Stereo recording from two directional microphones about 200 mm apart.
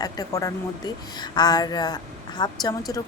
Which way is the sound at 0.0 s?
20° left (ahead or behind).